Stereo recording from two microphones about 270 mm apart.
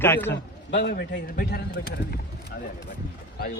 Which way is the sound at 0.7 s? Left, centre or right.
Left.